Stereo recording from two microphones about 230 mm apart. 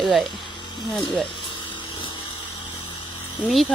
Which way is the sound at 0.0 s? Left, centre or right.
Centre.